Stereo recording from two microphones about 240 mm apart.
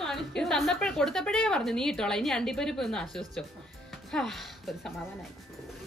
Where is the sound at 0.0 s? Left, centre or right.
Centre.